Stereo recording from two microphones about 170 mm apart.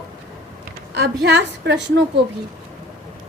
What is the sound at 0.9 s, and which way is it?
Speech, 85° right.